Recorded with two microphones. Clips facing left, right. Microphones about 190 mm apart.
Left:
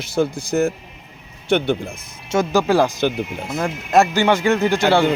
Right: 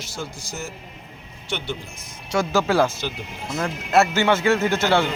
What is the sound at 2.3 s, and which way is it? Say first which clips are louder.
Speech: left 4 dB; 20° left (ahead or behind).